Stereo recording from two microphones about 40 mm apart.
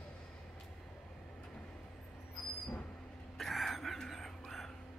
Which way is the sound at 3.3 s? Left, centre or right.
Centre.